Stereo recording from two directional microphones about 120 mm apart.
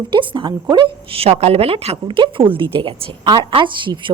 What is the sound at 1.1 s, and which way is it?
A woman's voice, 60° right (ahead or behind).